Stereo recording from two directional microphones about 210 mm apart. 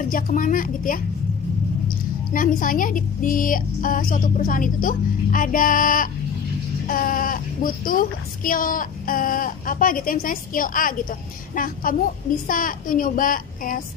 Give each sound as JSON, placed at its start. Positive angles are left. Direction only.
{"t": 0.1, "sound": "speech", "side_deg": 40}